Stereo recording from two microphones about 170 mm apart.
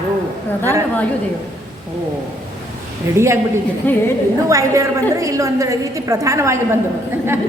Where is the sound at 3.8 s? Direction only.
10° left (ahead or behind).